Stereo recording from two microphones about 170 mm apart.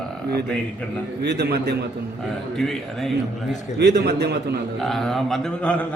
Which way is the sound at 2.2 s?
Centre (ahead or behind).